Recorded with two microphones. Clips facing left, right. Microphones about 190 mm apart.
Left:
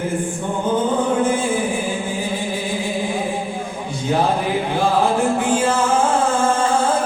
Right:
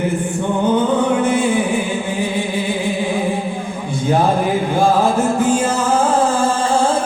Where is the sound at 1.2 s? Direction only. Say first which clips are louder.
Right 2 dB; 70° right (ahead or behind).